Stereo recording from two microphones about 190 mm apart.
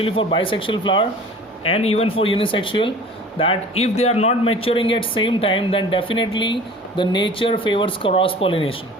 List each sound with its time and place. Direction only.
0.0 s speech: 30° left (ahead or behind)